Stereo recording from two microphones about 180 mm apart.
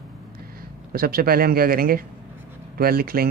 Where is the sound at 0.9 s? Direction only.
55° right (ahead or behind).